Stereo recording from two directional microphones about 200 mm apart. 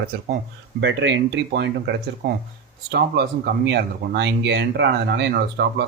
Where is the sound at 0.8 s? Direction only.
65° right (ahead or behind).